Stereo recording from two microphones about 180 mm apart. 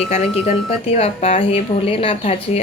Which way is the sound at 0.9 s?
35° left (ahead or behind).